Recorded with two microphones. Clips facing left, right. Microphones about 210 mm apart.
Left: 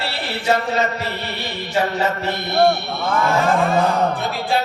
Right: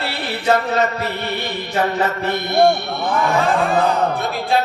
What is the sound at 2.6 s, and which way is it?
Speech, 15° right (ahead or behind).